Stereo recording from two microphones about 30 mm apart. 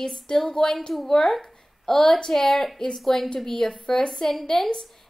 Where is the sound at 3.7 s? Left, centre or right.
Left.